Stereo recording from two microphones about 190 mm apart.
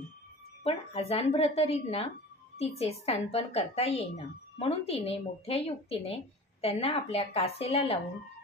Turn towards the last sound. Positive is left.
turn(degrees=30)  # may be behind; listen again after turning